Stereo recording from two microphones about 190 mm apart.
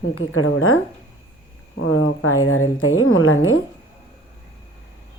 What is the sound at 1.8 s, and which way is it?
A woman's voice, 90° left.